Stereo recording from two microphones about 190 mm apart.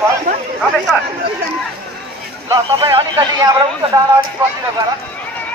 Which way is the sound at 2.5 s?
20° right (ahead or behind).